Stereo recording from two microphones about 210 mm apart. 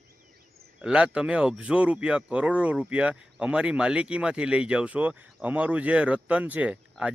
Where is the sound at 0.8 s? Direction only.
5° right (ahead or behind).